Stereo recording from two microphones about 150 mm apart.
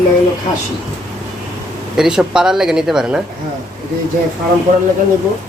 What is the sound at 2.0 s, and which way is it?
Speech, 5° right (ahead or behind).